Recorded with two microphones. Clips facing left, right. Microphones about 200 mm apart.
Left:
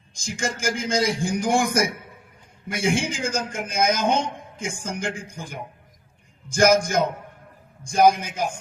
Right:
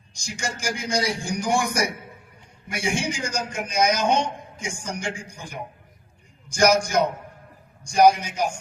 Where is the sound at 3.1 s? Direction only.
55° left (ahead or behind).